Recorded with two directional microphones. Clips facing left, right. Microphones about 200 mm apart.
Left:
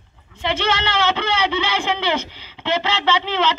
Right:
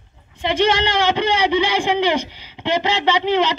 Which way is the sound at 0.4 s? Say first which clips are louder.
Right 4 dB; 15° right (ahead or behind).